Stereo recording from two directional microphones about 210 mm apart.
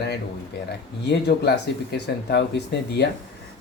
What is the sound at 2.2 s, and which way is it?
Speech, 55° left (ahead or behind).